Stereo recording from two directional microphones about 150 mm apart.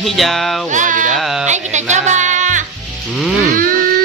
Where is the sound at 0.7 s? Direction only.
60° right (ahead or behind).